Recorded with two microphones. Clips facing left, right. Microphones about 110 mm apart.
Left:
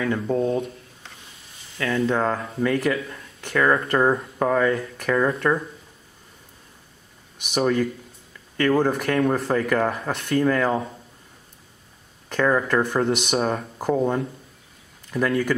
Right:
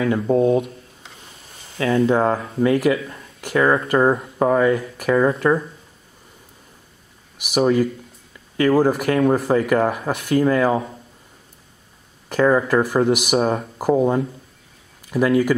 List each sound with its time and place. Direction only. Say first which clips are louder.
0.0 s speech: right 5 dB; 10° right (ahead or behind)
1.8 s speech: right 5 dB; 25° right (ahead or behind)
2.0 s speech: right 5 dB; 15° right (ahead or behind)
7.3 s speech: right 4 dB; 10° right (ahead or behind)
12.3 s speech: right 4 dB; 10° right (ahead or behind)